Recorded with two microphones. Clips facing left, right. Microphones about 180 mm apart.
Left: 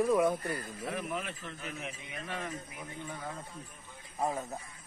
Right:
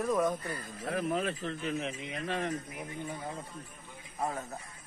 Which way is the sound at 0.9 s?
35° right (ahead or behind).